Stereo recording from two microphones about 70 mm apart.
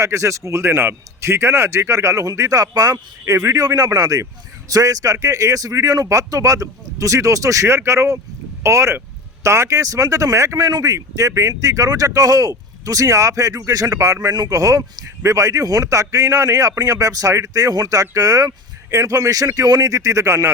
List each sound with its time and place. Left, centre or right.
0.0 s a man's voice: right
10.7 s speech: right
10.9 s speech: right